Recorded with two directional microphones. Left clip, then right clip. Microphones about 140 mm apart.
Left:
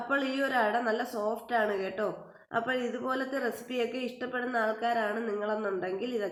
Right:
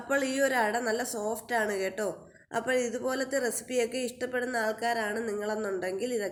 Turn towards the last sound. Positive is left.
turn(degrees=-30)  # may be behind; listen again after turning